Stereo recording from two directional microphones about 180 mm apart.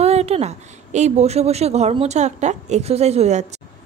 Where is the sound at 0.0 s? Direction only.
35° right (ahead or behind).